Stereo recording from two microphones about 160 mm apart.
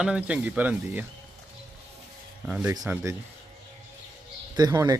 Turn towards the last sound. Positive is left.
turn(degrees=-25)  # may be behind; listen again after turning